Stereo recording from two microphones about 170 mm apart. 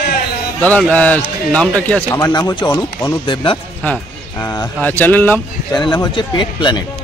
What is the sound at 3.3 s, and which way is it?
Speech, 30° left (ahead or behind).